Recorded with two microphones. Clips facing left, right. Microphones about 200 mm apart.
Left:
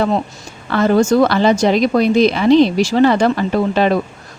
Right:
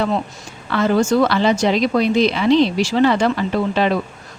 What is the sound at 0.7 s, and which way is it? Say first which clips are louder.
Speech: left 3 dB; 45° left (ahead or behind).